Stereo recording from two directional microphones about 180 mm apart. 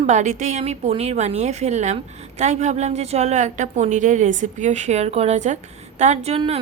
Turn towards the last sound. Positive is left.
turn(degrees=-35)  # may be behind; listen again after turning